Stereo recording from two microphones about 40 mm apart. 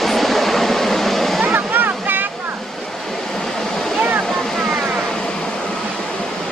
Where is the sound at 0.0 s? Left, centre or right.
Centre.